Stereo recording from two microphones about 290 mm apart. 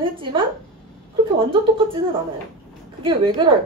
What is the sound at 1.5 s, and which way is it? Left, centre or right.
Speech, centre.